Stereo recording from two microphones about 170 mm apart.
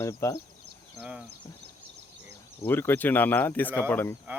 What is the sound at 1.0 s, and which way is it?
Speech, 5° right (ahead or behind).